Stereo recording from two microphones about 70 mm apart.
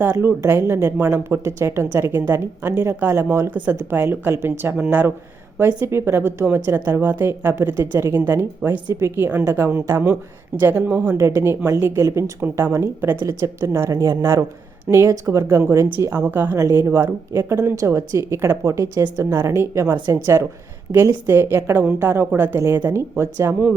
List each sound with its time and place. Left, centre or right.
0.0 s a woman's voice: right
4.8 s speech: right
5.5 s a woman's voice: right
13.2 s a woman's voice: right
13.9 s a woman's voice: right
14.2 s a woman's voice: right
16.1 s speech: right
16.6 s a woman's voice: right
16.8 s a woman's voice: right
17.7 s a woman's voice: right
21.0 s a woman's voice: right